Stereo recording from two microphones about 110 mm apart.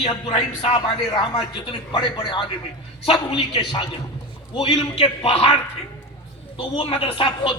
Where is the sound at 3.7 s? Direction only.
45° left (ahead or behind).